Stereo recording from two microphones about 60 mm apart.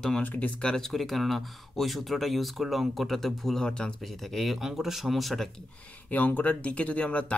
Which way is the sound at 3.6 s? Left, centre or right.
Centre.